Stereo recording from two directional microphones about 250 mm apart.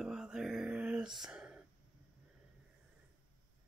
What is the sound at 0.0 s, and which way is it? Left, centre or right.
Music, centre.